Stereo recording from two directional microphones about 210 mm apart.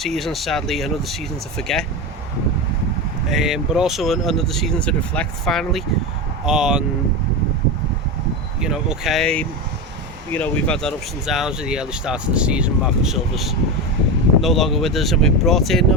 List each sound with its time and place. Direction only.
0.0 s speech: centre (ahead or behind)
3.2 s speech: centre (ahead or behind)
8.6 s speech: 5° right (ahead or behind)